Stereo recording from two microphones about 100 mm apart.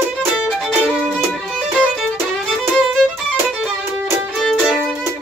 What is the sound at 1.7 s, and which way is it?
Violin, 10° right (ahead or behind).